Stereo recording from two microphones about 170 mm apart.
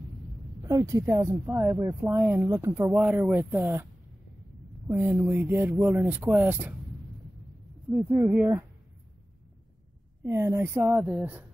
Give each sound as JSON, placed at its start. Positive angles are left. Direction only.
{"t": 0.7, "sound": "speech", "side_deg": -20}
{"t": 4.8, "sound": "speech", "side_deg": -15}
{"t": 8.0, "sound": "speech", "side_deg": -15}
{"t": 10.2, "sound": "speech", "side_deg": -15}